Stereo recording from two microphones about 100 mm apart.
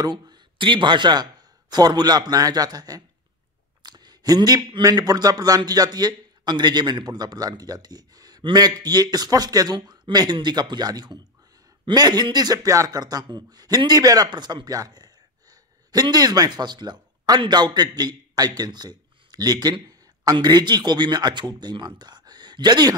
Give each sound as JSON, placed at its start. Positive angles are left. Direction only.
{"t": 0.0, "sound": "a man's voice", "side_deg": -45}